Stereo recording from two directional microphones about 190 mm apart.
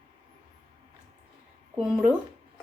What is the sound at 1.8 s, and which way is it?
Speech, 5° right (ahead or behind).